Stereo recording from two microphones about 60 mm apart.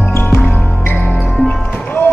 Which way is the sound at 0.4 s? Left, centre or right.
Left.